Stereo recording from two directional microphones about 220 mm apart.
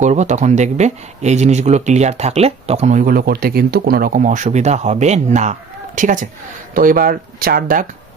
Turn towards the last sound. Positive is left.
turn(degrees=-40)  # may be behind; listen again after turning